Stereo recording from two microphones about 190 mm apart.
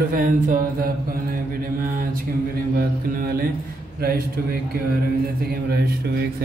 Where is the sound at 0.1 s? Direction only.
45° right (ahead or behind).